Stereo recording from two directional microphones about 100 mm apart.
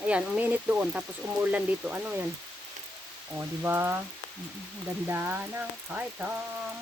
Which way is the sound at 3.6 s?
20° right (ahead or behind).